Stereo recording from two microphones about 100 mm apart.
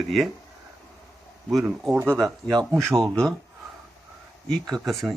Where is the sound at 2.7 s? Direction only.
5° left (ahead or behind).